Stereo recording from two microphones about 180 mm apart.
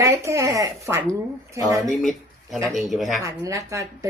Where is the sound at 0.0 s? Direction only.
15° right (ahead or behind).